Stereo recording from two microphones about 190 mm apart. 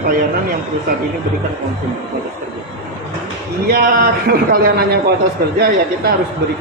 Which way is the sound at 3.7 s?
50° right (ahead or behind).